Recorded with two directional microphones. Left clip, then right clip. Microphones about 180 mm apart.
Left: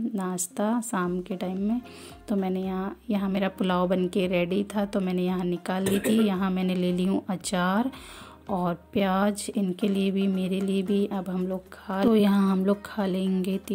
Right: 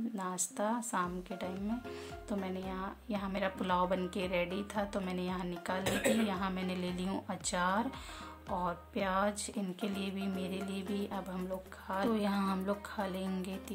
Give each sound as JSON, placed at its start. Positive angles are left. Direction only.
{"t": 0.1, "sound": "speech", "side_deg": 35}